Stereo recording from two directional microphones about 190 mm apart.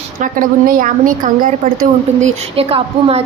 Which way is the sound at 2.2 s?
30° right (ahead or behind).